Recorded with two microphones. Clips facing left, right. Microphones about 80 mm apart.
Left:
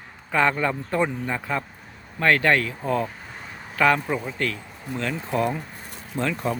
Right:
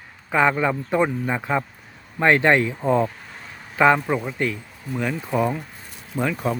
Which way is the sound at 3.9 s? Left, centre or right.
Centre.